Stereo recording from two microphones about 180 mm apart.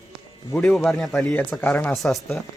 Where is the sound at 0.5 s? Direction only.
5° left (ahead or behind).